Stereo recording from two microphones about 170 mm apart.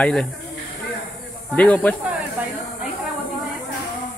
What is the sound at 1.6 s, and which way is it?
Speech, 10° left (ahead or behind).